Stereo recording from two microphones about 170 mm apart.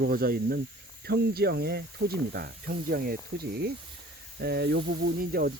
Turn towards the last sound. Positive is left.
turn(degrees=-60)  # may be behind; listen again after turning